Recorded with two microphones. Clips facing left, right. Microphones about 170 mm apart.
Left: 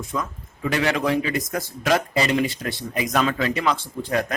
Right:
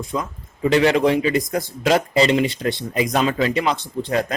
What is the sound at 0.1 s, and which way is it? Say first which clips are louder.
Speech: right 2 dB; 25° right (ahead or behind).